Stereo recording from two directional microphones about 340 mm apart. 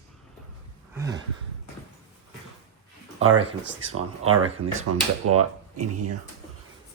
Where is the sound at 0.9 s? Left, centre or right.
Centre.